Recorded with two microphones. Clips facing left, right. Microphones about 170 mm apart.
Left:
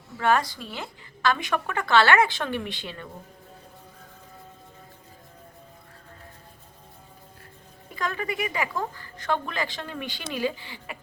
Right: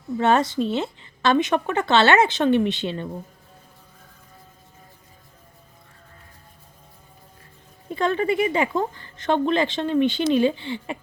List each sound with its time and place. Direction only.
0.2 s speech: 25° right (ahead or behind)
7.9 s speech: 30° right (ahead or behind)